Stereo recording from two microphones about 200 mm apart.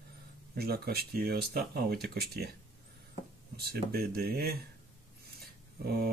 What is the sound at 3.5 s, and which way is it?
Speech, 50° right (ahead or behind).